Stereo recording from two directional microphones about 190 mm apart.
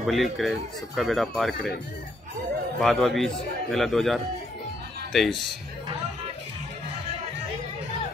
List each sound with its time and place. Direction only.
0.0 s speech: centre (ahead or behind)
2.8 s speech: centre (ahead or behind)